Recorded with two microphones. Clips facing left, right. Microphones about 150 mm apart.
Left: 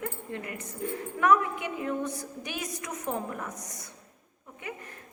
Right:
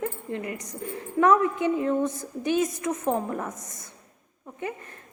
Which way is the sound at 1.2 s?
25° right (ahead or behind).